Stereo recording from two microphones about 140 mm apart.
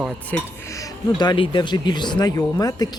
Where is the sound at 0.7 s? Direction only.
30° left (ahead or behind).